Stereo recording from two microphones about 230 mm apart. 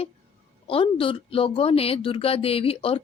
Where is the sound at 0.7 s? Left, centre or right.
Left.